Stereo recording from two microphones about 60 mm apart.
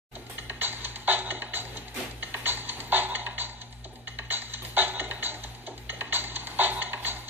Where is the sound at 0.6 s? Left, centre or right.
Right.